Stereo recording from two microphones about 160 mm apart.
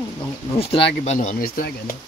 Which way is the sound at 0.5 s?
35° left (ahead or behind).